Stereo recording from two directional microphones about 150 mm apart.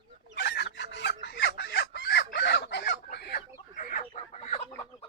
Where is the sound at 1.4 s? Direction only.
90° left.